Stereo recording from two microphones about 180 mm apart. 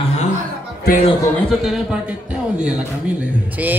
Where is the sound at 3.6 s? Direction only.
10° right (ahead or behind).